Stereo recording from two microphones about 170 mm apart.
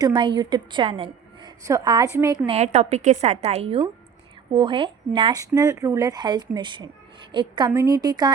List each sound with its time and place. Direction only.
0.0 s speech: 25° right (ahead or behind)
2.5 s a woman's voice: 40° right (ahead or behind); by 8.3 s 25° right (ahead or behind)